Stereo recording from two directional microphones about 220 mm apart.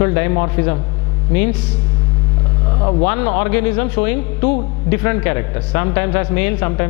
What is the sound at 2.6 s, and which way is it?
Vehicle, 25° left (ahead or behind).